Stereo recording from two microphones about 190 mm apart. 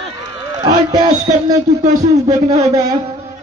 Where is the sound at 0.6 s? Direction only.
20° right (ahead or behind).